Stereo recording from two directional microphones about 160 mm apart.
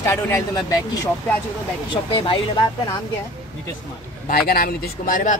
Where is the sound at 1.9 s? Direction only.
30° left (ahead or behind).